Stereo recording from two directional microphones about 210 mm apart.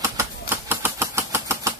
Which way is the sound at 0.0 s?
10° right (ahead or behind).